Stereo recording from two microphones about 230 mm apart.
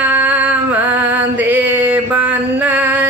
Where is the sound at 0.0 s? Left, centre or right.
Centre.